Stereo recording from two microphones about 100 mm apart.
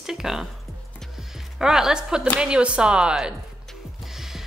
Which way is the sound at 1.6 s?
5° right (ahead or behind).